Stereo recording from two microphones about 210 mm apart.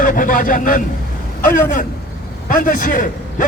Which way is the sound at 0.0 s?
40° left (ahead or behind).